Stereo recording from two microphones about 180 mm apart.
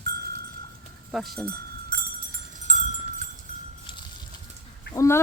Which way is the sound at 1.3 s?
60° right (ahead or behind).